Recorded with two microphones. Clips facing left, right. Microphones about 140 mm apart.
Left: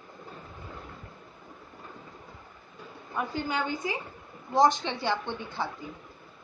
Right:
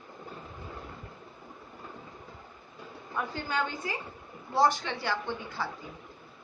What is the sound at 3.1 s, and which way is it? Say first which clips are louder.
A woman's voice: left 2 dB; 15° left (ahead or behind).